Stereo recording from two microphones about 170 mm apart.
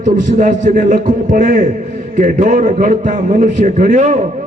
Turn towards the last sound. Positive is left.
turn(degrees=-45)  # may be behind; listen again after turning